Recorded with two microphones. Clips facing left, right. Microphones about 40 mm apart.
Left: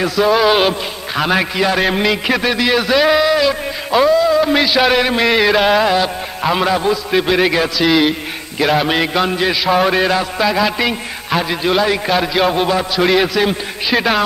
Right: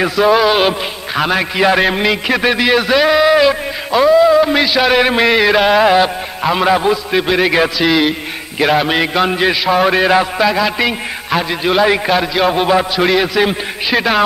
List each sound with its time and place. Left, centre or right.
0.0 s a man's voice: centre
1.6 s a man's voice: centre
3.9 s a man's voice: centre
5.0 s a man's voice: centre
5.3 s a man's voice: centre
5.9 s a sound: centre
6.4 s a man's voice: centre
7.5 s a man's voice: centre
7.9 s a sound: centre
9.3 s a man's voice: centre
13.1 s a man's voice: centre